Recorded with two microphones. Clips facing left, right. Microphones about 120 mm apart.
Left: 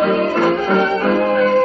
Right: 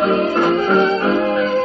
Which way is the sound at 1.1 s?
50° left (ahead or behind).